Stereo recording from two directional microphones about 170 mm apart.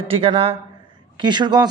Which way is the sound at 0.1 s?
35° right (ahead or behind).